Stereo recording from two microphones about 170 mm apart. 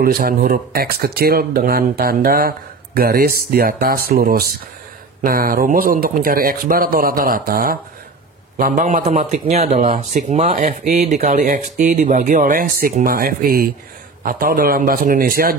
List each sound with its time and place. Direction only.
0.0 s a man's voice: 60° right (ahead or behind)